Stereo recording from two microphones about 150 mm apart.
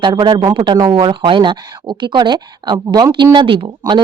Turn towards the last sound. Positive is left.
turn(degrees=-35)  # may be behind; listen again after turning